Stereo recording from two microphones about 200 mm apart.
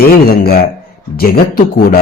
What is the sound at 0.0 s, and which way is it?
Speech, 50° left (ahead or behind).